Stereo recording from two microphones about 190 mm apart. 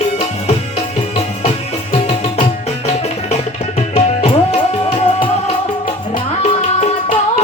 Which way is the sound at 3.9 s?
35° left (ahead or behind).